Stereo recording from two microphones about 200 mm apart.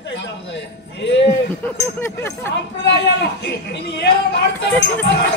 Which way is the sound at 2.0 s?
10° left (ahead or behind).